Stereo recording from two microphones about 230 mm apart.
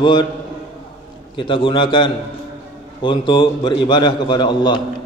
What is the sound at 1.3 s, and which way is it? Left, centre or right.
A man's voice, left.